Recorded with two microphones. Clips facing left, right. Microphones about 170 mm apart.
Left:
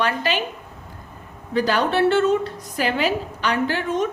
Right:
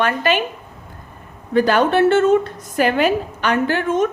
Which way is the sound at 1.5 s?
50° right (ahead or behind).